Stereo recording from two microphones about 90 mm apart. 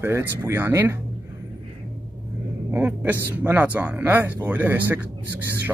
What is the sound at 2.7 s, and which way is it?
Speech, 20° right (ahead or behind).